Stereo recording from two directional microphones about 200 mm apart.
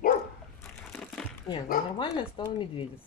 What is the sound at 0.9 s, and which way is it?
Crumpling, 5° left (ahead or behind).